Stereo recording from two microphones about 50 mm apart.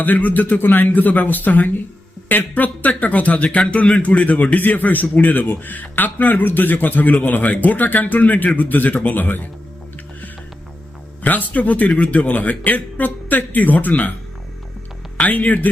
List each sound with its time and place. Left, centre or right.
0.0 s a man's voice: left
11.2 s a man's voice: left
15.2 s a man's voice: left